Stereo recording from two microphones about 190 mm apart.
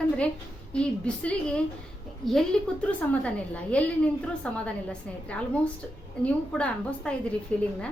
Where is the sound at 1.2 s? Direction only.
5° left (ahead or behind).